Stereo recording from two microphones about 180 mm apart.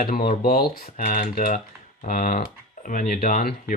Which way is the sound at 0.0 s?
55° left (ahead or behind).